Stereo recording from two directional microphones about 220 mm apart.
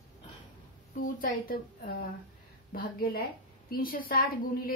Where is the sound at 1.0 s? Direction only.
40° left (ahead or behind).